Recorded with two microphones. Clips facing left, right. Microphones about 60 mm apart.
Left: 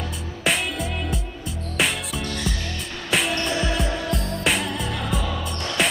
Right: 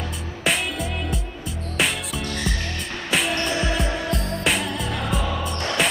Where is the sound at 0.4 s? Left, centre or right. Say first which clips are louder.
Even; centre.